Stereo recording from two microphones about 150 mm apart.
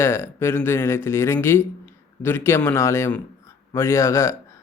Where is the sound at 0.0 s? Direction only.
15° left (ahead or behind).